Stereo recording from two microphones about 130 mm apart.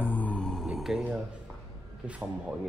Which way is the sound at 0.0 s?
15° left (ahead or behind).